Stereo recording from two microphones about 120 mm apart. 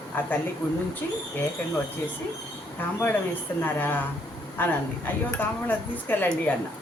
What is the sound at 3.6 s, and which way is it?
Speech, 15° left (ahead or behind).